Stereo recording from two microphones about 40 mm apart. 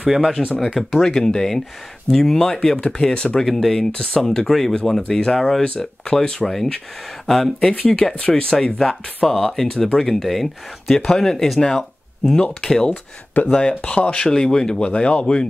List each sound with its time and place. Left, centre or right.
0.0 s speech: centre
1.0 s speech: centre
3.4 s speech: centre
3.9 s speech: left; by 7.8 s centre
7.9 s speech: left
8.7 s speech: centre
12.6 s speech: centre
12.9 s speech: left
13.5 s speech: left